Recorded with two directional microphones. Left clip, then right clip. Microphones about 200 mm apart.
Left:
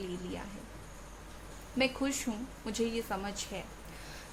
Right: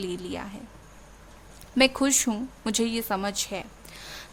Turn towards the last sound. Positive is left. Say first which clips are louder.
# right 9 dB
turn(degrees=-55)  # may be behind; listen again after turning